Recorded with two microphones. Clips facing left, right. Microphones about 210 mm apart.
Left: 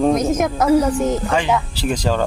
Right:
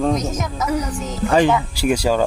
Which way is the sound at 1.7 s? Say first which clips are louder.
Right 2 dB; 10° right (ahead or behind).